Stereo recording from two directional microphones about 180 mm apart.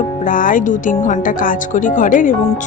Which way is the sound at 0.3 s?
50° left (ahead or behind).